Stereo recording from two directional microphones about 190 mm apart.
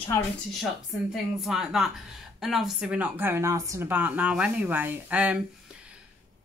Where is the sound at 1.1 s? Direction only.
Centre (ahead or behind).